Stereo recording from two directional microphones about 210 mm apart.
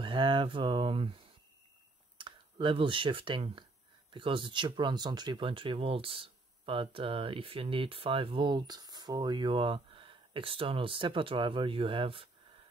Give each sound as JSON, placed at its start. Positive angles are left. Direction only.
{"t": 0.0, "sound": "speech", "side_deg": -25}
{"t": 2.1, "sound": "speech", "side_deg": -25}